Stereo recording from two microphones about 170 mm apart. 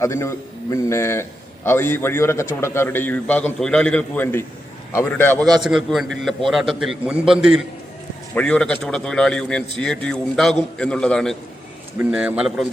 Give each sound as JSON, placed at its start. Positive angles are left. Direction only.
{"t": 0.0, "sound": "a man's voice", "side_deg": 15}
{"t": 5.6, "sound": "a man's voice", "side_deg": 0}
{"t": 11.9, "sound": "speech", "side_deg": -5}